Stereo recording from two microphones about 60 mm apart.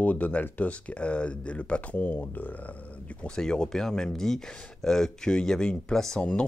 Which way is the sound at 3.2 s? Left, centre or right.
Centre.